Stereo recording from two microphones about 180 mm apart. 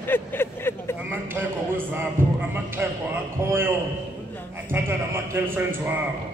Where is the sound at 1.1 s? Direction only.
10° right (ahead or behind).